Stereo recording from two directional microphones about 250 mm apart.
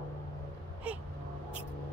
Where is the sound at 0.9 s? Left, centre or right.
Centre.